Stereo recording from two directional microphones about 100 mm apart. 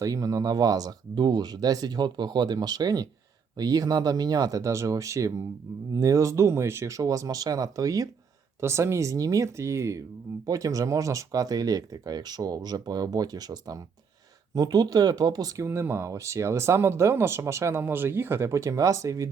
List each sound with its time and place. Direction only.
0.0 s speech: 35° right (ahead or behind)
15.6 s speech: 25° right (ahead or behind)